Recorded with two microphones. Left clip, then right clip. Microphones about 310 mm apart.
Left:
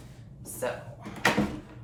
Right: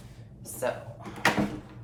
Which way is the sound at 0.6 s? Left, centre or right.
Centre.